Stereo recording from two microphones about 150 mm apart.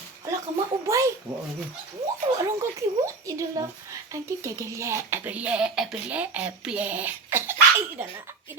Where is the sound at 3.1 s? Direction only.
20° right (ahead or behind).